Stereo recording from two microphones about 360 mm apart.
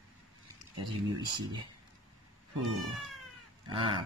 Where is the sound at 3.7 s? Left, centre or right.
Centre.